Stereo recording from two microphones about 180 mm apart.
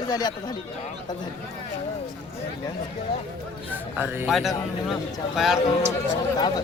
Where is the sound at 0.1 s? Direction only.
25° left (ahead or behind).